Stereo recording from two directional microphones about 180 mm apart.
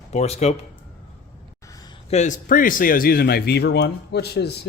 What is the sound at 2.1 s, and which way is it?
Speech, 40° left (ahead or behind).